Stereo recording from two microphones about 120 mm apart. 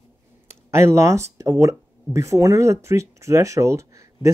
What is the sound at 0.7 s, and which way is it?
Speech, 25° right (ahead or behind).